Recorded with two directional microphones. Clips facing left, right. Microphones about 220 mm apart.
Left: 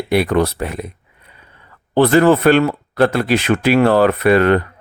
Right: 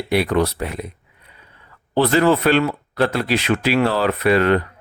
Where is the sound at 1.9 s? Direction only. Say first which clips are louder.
Left 4 dB; 55° left (ahead or behind).